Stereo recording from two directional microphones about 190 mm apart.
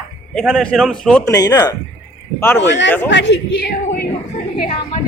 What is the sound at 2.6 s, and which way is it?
Speech, 70° left (ahead or behind).